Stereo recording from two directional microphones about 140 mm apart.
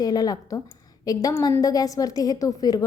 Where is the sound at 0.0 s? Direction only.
25° left (ahead or behind).